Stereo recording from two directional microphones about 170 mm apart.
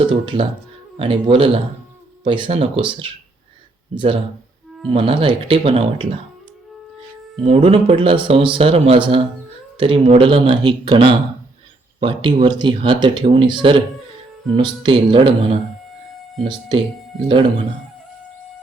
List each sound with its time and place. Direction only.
0.0 s speech: 30° right (ahead or behind)
3.9 s speech: 30° right (ahead or behind)
7.4 s speech: 35° right (ahead or behind)